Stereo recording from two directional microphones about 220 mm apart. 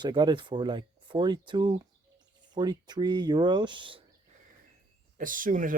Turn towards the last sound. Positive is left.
turn(degrees=-40)  # may be behind; listen again after turning